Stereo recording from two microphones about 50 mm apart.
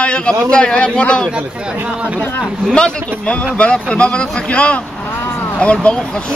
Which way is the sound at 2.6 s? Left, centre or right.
Centre.